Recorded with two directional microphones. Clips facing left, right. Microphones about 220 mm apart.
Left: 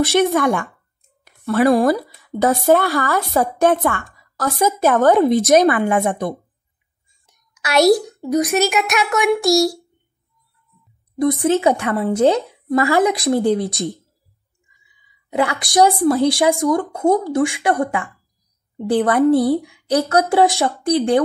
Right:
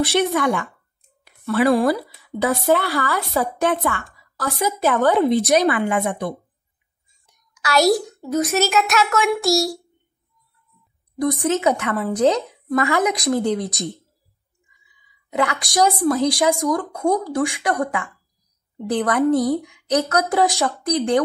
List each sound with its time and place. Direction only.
0.0 s a woman's voice: 45° left (ahead or behind)
1.2 s a sound: 45° left (ahead or behind)
2.2 s a woman's voice: 45° left (ahead or behind)
7.2 s a sound: 20° left (ahead or behind)
7.8 s a child's voice: centre (ahead or behind)
8.2 s a woman's voice: 15° left (ahead or behind)
11.4 s speech: 30° left (ahead or behind)
15.3 s a woman's voice: 30° left (ahead or behind)